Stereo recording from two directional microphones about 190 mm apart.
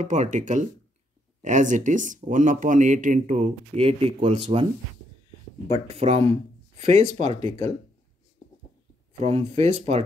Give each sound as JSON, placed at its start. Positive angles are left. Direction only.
{"t": 0.0, "sound": "speech", "side_deg": -40}
{"t": 5.7, "sound": "speech", "side_deg": -35}
{"t": 9.2, "sound": "speech", "side_deg": -35}